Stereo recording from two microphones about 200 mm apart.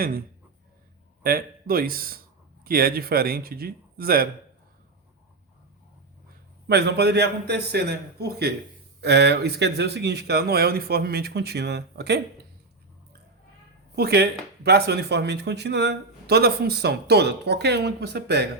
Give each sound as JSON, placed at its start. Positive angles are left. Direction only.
{"t": 1.2, "sound": "a man's voice", "side_deg": -50}
{"t": 6.7, "sound": "speech", "side_deg": -55}
{"t": 13.9, "sound": "speech", "side_deg": -55}